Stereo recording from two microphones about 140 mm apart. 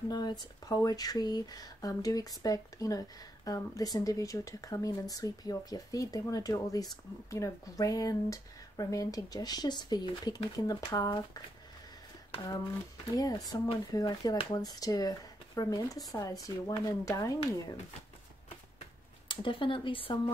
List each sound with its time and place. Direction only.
0.1 s speech: 30° left (ahead or behind)
13.1 s speech: 25° left (ahead or behind)
18.8 s a sound: 40° left (ahead or behind)